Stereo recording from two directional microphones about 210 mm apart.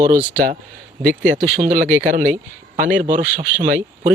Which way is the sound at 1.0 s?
40° right (ahead or behind).